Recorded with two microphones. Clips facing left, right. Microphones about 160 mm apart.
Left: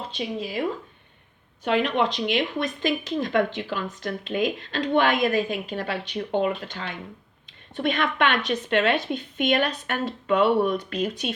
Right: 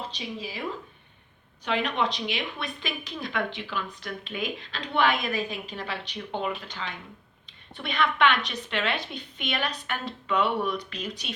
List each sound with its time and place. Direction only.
0.2 s speech: 55° left (ahead or behind)
1.6 s speech: 50° left (ahead or behind)